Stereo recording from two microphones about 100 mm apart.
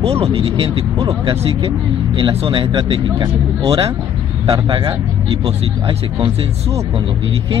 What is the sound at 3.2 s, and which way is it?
Speech, 40° right (ahead or behind).